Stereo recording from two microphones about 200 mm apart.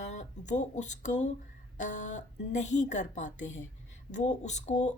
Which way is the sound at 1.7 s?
40° left (ahead or behind).